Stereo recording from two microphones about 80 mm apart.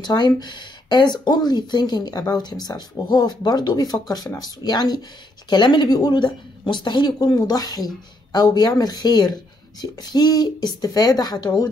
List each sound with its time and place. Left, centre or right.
0.0 s speech: left